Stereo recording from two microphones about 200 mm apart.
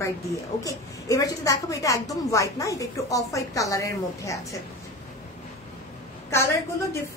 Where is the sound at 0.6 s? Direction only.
15° left (ahead or behind).